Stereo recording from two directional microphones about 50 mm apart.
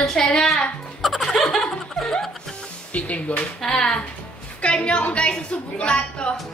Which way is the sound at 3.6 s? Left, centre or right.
Centre.